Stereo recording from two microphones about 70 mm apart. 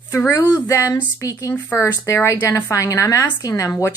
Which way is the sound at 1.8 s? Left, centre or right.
Left.